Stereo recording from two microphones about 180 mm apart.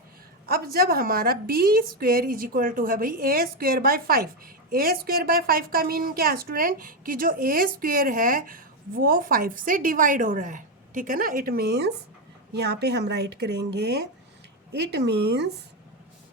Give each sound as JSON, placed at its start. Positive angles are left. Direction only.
{"t": 0.4, "sound": "a woman's voice", "side_deg": -55}